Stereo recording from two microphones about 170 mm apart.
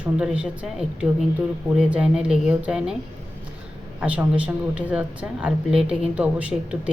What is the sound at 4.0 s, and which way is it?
Speech, 10° right (ahead or behind).